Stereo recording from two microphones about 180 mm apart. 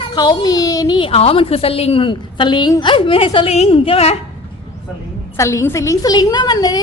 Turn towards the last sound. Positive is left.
turn(degrees=20)  # may be behind; listen again after turning